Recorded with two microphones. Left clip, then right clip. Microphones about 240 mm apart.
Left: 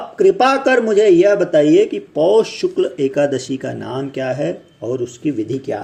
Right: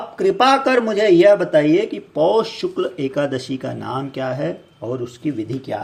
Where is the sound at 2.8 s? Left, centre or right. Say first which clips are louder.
Left 5 dB; centre.